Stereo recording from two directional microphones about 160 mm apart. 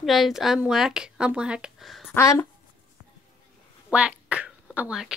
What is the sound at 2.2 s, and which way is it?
Speech, 20° left (ahead or behind).